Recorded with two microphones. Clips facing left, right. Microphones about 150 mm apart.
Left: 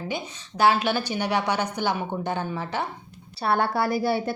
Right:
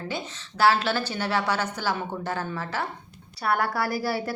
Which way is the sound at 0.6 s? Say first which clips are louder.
Left 1 dB; 15° left (ahead or behind).